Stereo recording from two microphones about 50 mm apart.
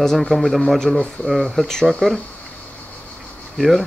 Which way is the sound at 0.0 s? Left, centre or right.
Centre.